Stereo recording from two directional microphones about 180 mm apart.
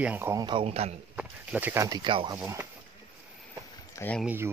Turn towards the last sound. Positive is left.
turn(degrees=-10)  # may be behind; listen again after turning